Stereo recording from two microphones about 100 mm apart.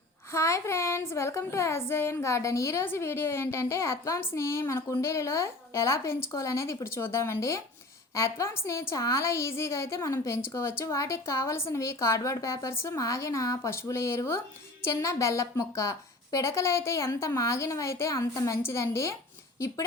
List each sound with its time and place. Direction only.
0.3 s a woman's voice: 30° left (ahead or behind)